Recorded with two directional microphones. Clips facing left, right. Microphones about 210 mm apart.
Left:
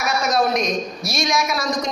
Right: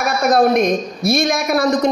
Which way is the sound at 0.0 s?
55° right (ahead or behind).